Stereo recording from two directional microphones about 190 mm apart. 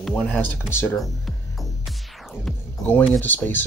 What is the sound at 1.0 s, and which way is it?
Music, centre (ahead or behind).